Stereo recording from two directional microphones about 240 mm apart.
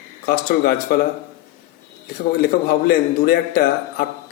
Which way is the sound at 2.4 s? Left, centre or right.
Left.